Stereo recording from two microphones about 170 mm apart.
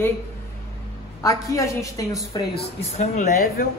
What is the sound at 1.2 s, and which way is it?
A woman's voice, 20° left (ahead or behind).